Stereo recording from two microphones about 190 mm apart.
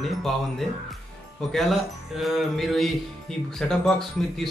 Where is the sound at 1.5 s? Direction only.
Centre (ahead or behind).